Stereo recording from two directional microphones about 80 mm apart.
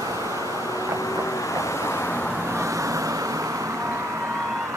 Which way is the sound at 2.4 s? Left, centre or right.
Right.